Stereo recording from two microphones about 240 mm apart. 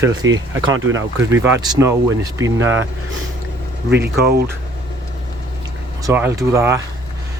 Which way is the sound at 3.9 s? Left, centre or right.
Right.